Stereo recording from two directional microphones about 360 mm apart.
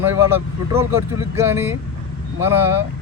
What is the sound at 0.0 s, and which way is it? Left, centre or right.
Speech, centre.